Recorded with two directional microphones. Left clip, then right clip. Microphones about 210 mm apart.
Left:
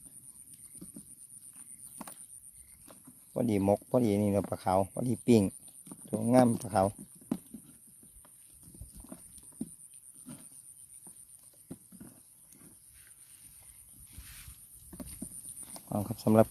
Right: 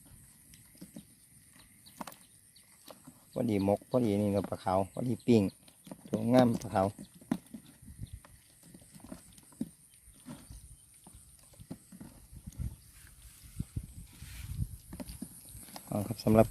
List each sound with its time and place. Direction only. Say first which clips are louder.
3.3 s speech: left 2 dB; 20° left (ahead or behind)
5.8 s clip-clop: right 2 dB; 15° right (ahead or behind)
6.1 s speech: left 1 dB; 10° left (ahead or behind)
15.9 s a sound: left 1 dB; 15° left (ahead or behind)